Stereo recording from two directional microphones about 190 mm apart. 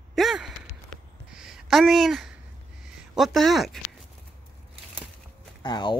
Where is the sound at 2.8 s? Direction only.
Centre (ahead or behind).